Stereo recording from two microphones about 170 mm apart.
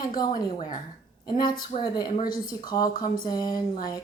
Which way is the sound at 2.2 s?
60° left (ahead or behind).